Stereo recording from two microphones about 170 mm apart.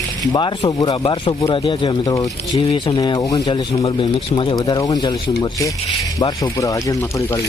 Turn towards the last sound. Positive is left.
turn(degrees=20)  # may be behind; listen again after turning